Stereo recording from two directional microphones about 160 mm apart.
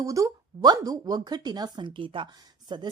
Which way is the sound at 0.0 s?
20° right (ahead or behind).